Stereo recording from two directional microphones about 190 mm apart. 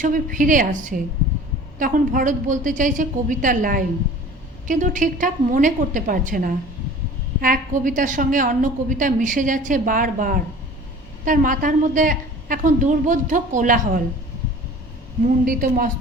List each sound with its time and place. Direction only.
0.0 s a woman's voice: 45° right (ahead or behind)
15.2 s a woman's voice: 45° right (ahead or behind)